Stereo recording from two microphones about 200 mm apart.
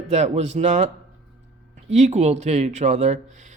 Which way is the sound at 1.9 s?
35° right (ahead or behind).